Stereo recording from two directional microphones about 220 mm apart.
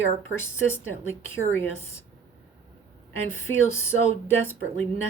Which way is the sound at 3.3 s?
10° left (ahead or behind).